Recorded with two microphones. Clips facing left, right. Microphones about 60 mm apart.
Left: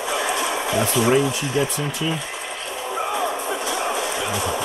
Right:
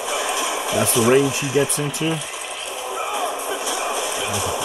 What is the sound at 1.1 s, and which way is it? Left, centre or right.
Speech, centre.